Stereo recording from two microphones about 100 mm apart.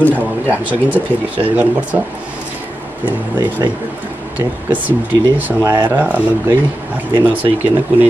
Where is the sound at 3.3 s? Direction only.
45° right (ahead or behind).